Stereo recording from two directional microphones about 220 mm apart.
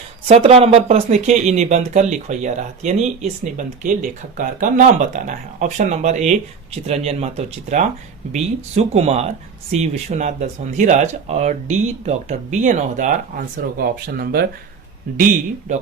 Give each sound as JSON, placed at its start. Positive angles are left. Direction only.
{"t": 0.3, "sound": "speech", "side_deg": -25}